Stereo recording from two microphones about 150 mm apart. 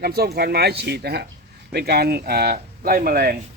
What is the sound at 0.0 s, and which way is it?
Speech, 90° right.